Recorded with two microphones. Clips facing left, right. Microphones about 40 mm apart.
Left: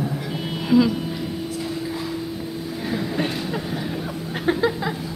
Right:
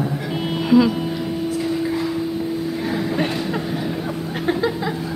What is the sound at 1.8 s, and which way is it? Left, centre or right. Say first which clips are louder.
Vehicle: right 6 dB; centre.